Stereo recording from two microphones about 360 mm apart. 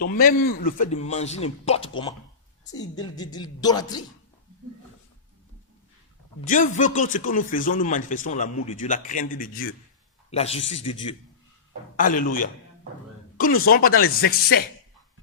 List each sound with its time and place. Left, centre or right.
0.0 s a woman's voice: left
6.5 s a man's voice: left
10.6 s speech: left
11.9 s speech: left